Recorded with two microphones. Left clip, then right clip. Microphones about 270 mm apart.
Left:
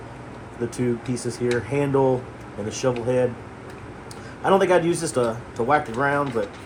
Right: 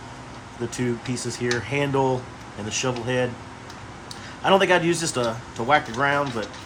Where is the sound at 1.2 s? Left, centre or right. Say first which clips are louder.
Left 1 dB; right.